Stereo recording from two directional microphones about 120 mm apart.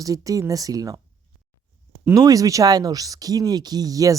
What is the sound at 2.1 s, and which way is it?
Speech, 30° right (ahead or behind).